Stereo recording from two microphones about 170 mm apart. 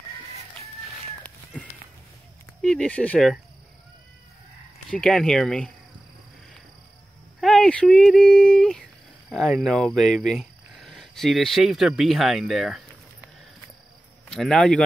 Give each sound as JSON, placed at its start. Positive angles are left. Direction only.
{"t": 1.2, "sound": "a sound", "side_deg": 10}
{"t": 2.6, "sound": "speech", "side_deg": 5}
{"t": 4.9, "sound": "speech", "side_deg": 5}
{"t": 7.3, "sound": "speech", "side_deg": 5}
{"t": 10.0, "sound": "cricket", "side_deg": 50}
{"t": 10.3, "sound": "speech", "side_deg": 0}
{"t": 14.3, "sound": "speech", "side_deg": 5}